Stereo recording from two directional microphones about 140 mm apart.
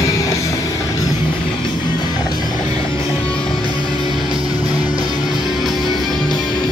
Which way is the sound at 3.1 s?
40° left (ahead or behind).